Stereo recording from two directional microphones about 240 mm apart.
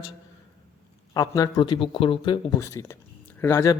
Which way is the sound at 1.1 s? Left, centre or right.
Centre.